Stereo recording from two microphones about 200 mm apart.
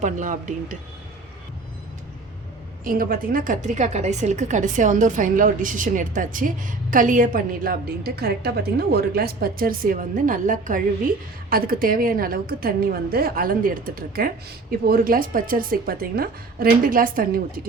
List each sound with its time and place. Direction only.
0.0 s a woman's voice: 40° right (ahead or behind)
2.8 s a woman's voice: 45° right (ahead or behind)